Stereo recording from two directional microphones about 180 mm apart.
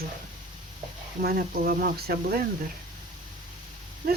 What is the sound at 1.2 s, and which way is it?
Speech, 55° right (ahead or behind).